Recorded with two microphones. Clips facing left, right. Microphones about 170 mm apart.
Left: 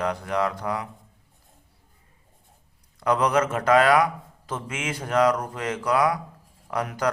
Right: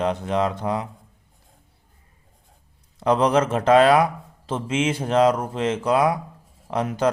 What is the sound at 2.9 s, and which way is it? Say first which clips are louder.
A man's voice: right 3 dB; 30° right (ahead or behind).